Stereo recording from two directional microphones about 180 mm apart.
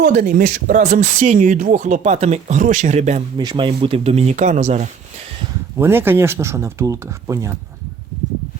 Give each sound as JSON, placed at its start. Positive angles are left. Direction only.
{"t": 0.0, "sound": "speech", "side_deg": -50}
{"t": 3.3, "sound": "speech", "side_deg": -25}
{"t": 5.7, "sound": "speech", "side_deg": -15}